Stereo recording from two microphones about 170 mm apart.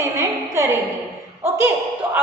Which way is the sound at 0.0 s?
20° right (ahead or behind).